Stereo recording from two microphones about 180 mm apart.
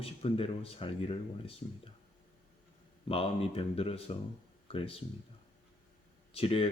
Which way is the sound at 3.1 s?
30° left (ahead or behind).